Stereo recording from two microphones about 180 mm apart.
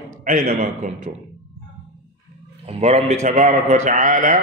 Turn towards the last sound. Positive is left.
turn(degrees=-45)  # may be behind; listen again after turning